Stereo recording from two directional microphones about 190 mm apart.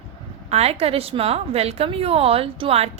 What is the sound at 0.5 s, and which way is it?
A woman's voice, 35° right (ahead or behind).